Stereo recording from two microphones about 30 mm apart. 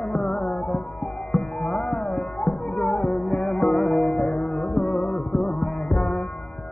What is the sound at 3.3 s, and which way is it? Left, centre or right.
Music, centre.